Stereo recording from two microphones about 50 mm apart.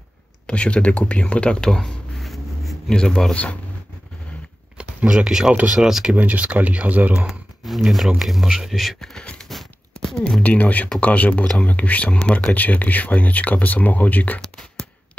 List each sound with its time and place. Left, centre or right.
0.5 s speech: left; by 2.7 s centre
2.9 s speech: centre
4.7 s speech: centre
6.1 s speech: right
7.6 s speech: centre
8.5 s speech: centre
8.7 s speech: centre
9.1 s a sound: centre
10.0 s speech: centre
10.4 s speech: left
12.5 s speech: left
14.5 s a sound: centre